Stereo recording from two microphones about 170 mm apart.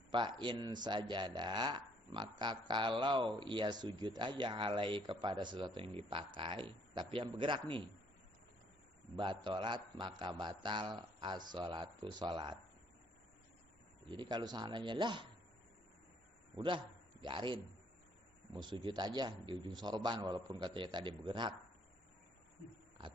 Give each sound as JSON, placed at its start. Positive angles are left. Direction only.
{"t": 0.1, "sound": "a man's voice", "side_deg": -30}
{"t": 9.1, "sound": "a man's voice", "side_deg": -30}
{"t": 14.1, "sound": "a man's voice", "side_deg": -25}
{"t": 16.6, "sound": "a man's voice", "side_deg": -25}